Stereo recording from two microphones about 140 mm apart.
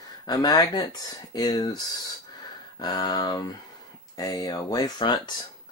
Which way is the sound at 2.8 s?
30° left (ahead or behind).